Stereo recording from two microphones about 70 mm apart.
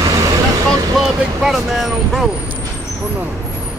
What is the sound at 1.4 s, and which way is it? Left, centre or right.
Vehicle, centre.